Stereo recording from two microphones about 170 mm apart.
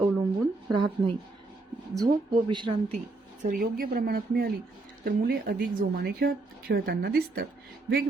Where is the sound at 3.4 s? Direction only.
55° right (ahead or behind).